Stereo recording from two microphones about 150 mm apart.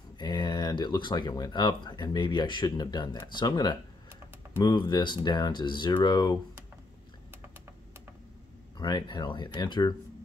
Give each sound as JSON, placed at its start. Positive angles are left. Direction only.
{"t": 0.2, "sound": "speech", "side_deg": 30}
{"t": 8.7, "sound": "speech", "side_deg": 30}